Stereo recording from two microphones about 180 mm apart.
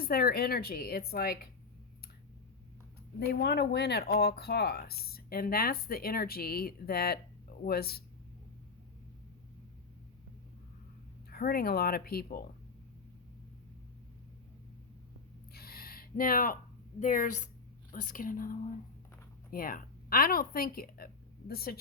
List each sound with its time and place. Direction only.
0.0 s speech: 55° left (ahead or behind)
3.2 s speech: 65° left (ahead or behind)
11.3 s speech: 55° left (ahead or behind)
15.5 s a sound: 55° left (ahead or behind)
17.0 s a woman's voice: 45° left (ahead or behind)